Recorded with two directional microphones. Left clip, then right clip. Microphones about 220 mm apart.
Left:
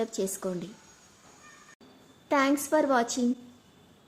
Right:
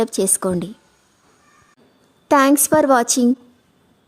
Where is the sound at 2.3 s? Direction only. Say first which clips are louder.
Right 11 dB; 50° right (ahead or behind).